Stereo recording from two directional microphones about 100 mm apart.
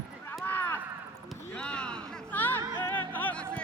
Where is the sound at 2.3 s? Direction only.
20° left (ahead or behind).